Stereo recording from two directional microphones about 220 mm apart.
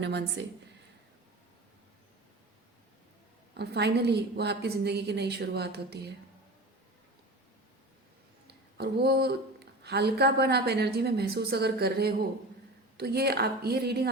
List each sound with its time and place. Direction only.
0.0 s a woman's voice: 50° right (ahead or behind)
3.6 s a woman's voice: 50° right (ahead or behind)
8.4 s a woman's voice: 45° right (ahead or behind)